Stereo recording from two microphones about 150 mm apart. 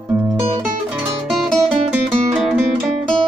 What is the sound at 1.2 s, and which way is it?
Music, centre (ahead or behind).